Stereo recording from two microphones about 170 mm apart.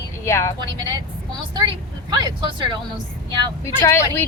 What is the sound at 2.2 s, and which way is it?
Speech, 25° right (ahead or behind).